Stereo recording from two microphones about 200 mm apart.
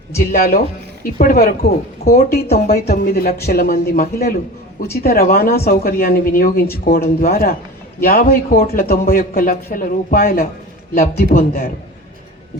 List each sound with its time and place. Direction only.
0.3 s a man's voice: 50° left (ahead or behind)